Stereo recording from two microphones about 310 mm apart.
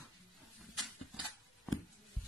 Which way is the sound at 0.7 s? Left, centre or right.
Centre.